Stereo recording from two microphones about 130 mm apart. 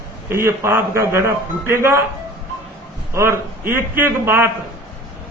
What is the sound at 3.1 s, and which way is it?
A man's voice, 20° right (ahead or behind).